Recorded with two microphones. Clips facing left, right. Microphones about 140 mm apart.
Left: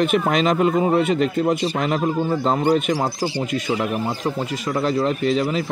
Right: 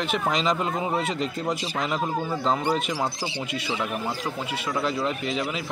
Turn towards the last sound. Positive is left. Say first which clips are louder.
# left 8 dB
turn(degrees=35)  # may be behind; listen again after turning